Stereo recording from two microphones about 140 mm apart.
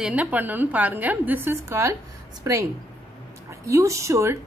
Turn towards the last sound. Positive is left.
turn(degrees=-20)  # may be behind; listen again after turning